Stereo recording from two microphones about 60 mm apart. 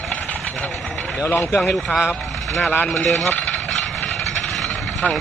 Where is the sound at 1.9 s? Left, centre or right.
Centre.